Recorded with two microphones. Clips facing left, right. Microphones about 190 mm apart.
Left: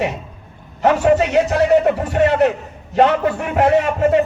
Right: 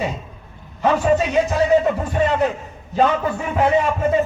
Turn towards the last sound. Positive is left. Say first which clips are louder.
# left 3 dB
turn(degrees=65)  # may be behind; listen again after turning